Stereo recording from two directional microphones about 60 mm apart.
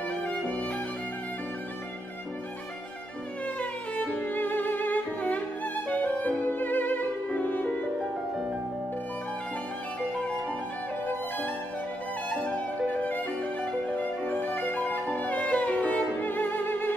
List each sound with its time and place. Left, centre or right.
0.3 s violin: left
3.9 s music: left
10.1 s music: centre
11.1 s violin: left
12.3 s music: left
16.2 s music: left